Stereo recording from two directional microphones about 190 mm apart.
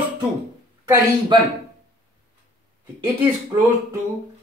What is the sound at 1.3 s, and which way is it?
Speech, 25° right (ahead or behind).